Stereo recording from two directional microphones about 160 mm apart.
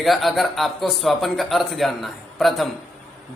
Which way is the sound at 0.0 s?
Centre (ahead or behind).